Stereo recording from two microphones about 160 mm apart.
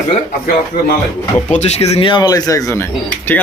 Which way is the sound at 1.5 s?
45° left (ahead or behind).